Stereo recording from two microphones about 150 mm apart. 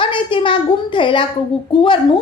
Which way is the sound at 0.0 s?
35° left (ahead or behind).